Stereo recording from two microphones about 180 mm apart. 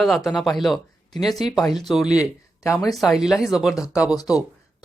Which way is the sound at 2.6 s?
20° left (ahead or behind).